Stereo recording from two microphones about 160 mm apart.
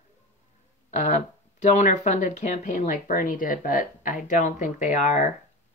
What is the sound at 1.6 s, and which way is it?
Speech, 50° left (ahead or behind).